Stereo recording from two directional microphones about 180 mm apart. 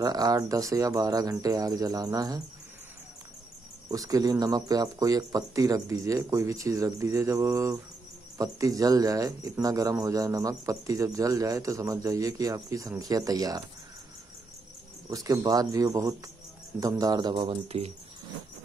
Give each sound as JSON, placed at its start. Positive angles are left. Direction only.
{"t": 0.0, "sound": "speech", "side_deg": -20}
{"t": 3.9, "sound": "speech", "side_deg": -20}
{"t": 15.0, "sound": "speech", "side_deg": -20}